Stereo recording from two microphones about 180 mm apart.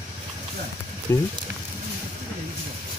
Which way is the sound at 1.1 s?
15° left (ahead or behind).